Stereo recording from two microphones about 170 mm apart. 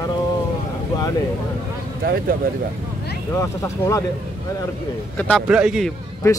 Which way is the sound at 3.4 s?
15° left (ahead or behind).